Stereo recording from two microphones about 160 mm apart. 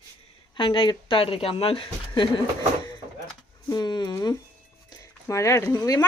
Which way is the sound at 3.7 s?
25° left (ahead or behind).